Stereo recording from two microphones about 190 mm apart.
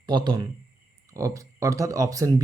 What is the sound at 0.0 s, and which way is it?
Speech, 25° right (ahead or behind).